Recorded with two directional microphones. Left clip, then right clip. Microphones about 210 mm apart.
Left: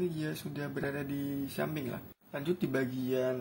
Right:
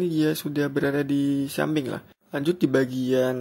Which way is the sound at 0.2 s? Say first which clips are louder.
Right 15 dB; 45° right (ahead or behind).